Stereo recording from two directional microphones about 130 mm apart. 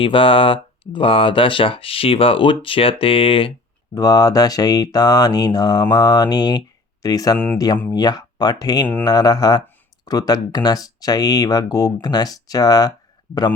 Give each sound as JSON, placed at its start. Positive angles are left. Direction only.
{"t": 0.0, "sound": "speech", "side_deg": 40}
{"t": 3.9, "sound": "mantra", "side_deg": 30}
{"t": 7.0, "sound": "speech", "side_deg": 30}
{"t": 7.3, "sound": "speech", "side_deg": 10}
{"t": 7.9, "sound": "mantra", "side_deg": 30}
{"t": 10.1, "sound": "speech", "side_deg": 30}